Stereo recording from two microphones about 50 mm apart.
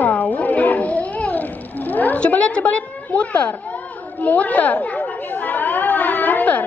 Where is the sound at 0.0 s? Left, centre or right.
Left.